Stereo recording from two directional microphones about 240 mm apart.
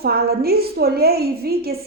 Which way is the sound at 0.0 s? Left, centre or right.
Right.